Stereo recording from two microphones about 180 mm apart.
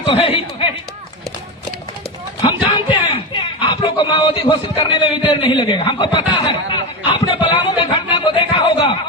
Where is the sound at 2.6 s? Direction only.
30° left (ahead or behind).